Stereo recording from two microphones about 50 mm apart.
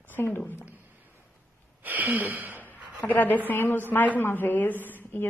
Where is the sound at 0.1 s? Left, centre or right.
Left.